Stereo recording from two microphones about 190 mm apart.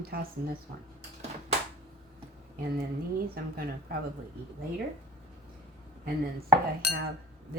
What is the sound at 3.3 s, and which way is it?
Speech, 50° right (ahead or behind).